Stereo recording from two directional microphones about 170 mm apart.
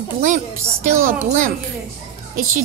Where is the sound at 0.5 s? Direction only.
15° right (ahead or behind).